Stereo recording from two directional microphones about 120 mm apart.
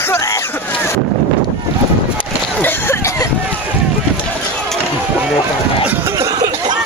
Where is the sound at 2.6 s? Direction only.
20° left (ahead or behind).